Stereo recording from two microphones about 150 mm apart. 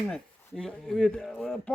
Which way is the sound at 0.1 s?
5° left (ahead or behind).